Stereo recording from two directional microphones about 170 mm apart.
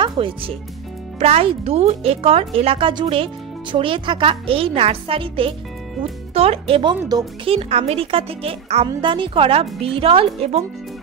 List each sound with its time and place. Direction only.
0.0 s speech: 30° right (ahead or behind)
7.4 s speech: 35° right (ahead or behind)